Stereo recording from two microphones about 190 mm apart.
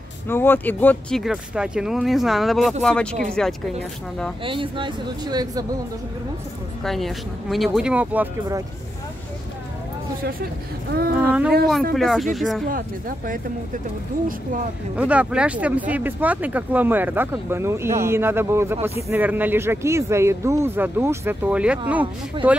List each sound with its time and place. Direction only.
0.3 s speech: 10° left (ahead or behind)
1.2 s speech: 5° right (ahead or behind)
4.5 s speech: 25° right (ahead or behind)
6.8 s speech: centre (ahead or behind)
10.9 s speech: 50° right (ahead or behind)
11.9 s speech: centre (ahead or behind)
15.0 s speech: 5° right (ahead or behind)
22.4 s speech: 25° right (ahead or behind)